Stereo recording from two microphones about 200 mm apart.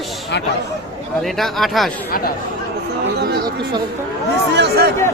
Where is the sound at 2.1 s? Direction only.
45° left (ahead or behind).